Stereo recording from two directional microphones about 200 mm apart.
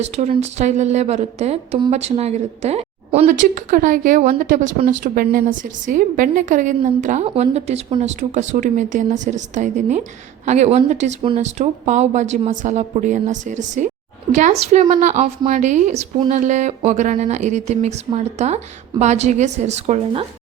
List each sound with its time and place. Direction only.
0.0 s speech: 35° right (ahead or behind)
3.2 s speech: 40° right (ahead or behind)